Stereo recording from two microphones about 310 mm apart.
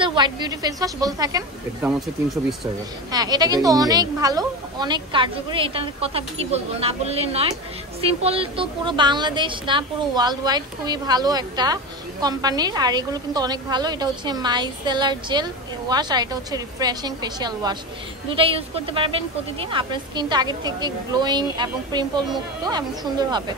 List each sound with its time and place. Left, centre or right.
0.0 s a woman's voice: centre
3.1 s a woman's voice: centre